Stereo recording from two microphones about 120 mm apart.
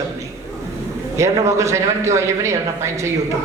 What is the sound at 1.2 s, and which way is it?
Speech, 25° right (ahead or behind).